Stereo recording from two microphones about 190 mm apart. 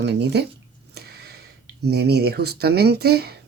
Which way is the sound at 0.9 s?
55° right (ahead or behind).